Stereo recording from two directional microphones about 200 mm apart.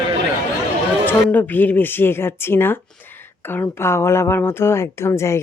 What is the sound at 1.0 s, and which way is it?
Speech, 10° left (ahead or behind).